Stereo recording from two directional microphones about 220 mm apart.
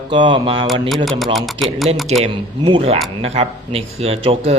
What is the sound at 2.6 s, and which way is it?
Speech, 25° right (ahead or behind).